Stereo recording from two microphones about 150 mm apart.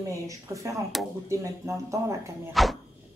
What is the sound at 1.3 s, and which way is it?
Speech, 20° right (ahead or behind).